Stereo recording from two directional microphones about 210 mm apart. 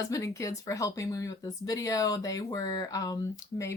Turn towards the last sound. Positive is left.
turn(degrees=15)  # may be behind; listen again after turning